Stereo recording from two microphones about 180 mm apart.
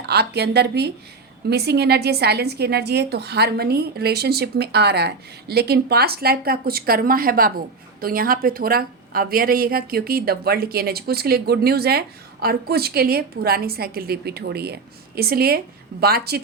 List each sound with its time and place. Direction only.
0.0 s a woman's voice: 65° right (ahead or behind)